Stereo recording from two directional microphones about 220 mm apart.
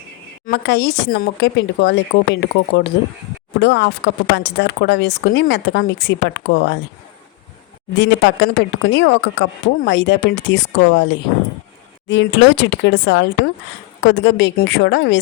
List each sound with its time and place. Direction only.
0.4 s speech: 50° left (ahead or behind)
7.9 s speech: 55° left (ahead or behind)